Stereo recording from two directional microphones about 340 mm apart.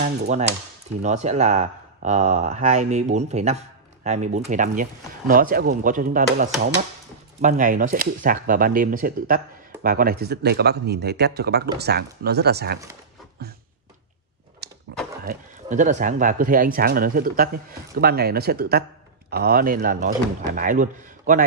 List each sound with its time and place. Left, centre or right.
0.0 s speech: centre
14.6 s a sound: right
15.2 s a man's voice: right